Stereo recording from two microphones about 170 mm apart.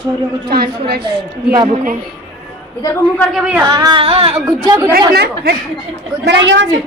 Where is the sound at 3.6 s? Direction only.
25° right (ahead or behind).